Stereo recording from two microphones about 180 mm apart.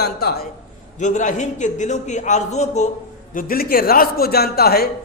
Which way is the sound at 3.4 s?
55° left (ahead or behind).